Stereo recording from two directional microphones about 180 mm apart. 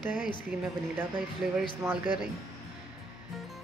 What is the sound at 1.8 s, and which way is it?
Speech, 15° right (ahead or behind).